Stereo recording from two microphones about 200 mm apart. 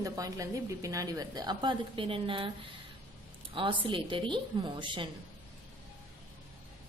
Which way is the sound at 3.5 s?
25° right (ahead or behind).